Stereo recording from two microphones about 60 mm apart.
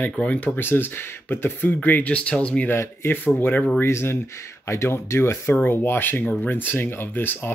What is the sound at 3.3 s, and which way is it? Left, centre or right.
Speech, left.